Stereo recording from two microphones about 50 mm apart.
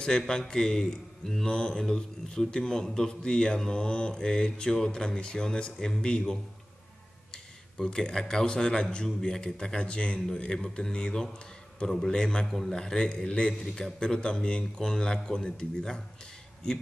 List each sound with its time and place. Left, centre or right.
0.3 s a man's voice: centre
7.8 s a man's voice: centre
11.9 s a man's voice: centre
12.2 s a man's voice: centre
12.4 s a man's voice: centre